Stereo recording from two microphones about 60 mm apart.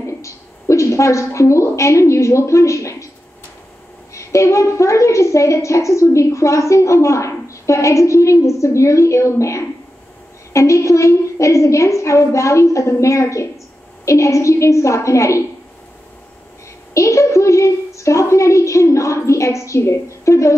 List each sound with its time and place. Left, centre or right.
0.0 s a woman's voice: left
4.1 s a woman's voice: left
16.9 s a woman's voice: left